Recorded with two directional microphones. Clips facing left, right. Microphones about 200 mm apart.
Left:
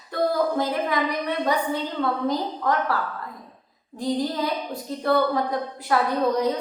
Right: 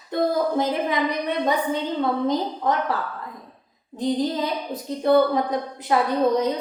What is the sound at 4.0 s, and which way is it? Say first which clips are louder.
A woman's voice: right 2 dB; 20° right (ahead or behind).